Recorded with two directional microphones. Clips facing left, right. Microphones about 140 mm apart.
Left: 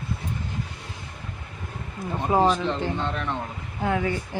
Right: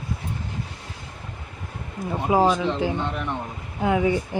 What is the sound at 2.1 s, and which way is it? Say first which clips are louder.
Speech: right 1 dB; 10° right (ahead or behind).